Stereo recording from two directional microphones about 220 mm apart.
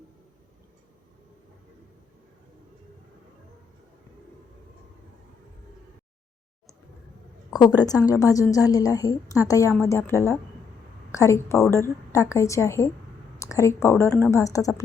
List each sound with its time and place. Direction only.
7.5 s a woman's voice: 20° left (ahead or behind)